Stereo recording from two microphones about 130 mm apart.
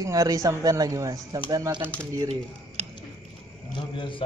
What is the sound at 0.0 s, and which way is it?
Speech, 25° right (ahead or behind).